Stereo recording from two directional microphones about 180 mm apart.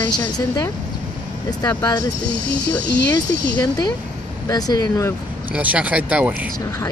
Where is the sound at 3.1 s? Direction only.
20° left (ahead or behind).